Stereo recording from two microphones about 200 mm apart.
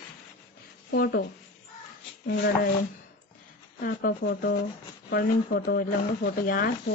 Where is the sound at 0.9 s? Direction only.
50° left (ahead or behind).